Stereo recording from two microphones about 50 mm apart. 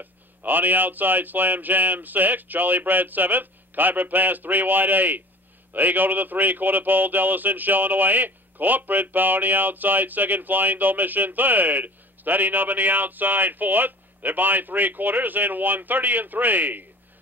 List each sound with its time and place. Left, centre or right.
0.0 s speech: right